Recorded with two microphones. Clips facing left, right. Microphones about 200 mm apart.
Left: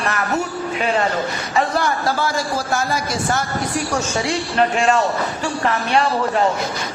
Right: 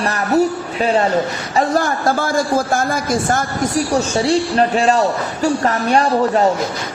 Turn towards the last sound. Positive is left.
turn(degrees=-40)  # may be behind; listen again after turning